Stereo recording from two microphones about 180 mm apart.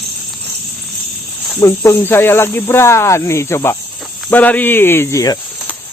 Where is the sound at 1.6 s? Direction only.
15° left (ahead or behind).